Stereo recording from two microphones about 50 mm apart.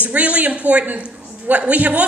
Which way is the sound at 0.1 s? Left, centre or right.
Right.